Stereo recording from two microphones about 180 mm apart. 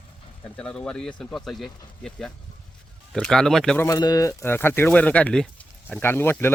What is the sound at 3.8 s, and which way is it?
Speech, 20° left (ahead or behind).